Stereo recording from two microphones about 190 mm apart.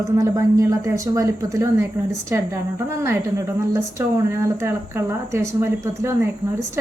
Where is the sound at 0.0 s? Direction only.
15° right (ahead or behind).